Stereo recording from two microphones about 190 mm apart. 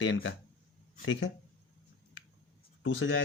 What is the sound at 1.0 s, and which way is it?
Speech, 90° left.